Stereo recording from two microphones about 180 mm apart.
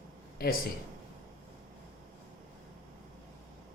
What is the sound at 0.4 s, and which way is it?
Speech, 55° left (ahead or behind).